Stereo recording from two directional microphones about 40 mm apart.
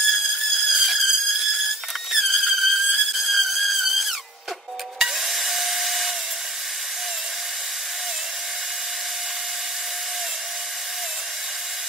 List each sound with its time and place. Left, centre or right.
0.1 s music: centre
2.1 s a sound: centre
4.9 s rub: centre